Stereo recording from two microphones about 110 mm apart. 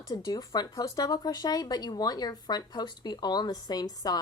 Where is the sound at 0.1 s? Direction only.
35° left (ahead or behind).